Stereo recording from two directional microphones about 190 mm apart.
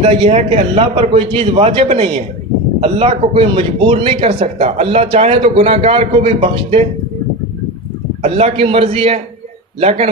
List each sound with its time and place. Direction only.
0.0 s speech: 35° right (ahead or behind)
8.2 s speech: 35° right (ahead or behind)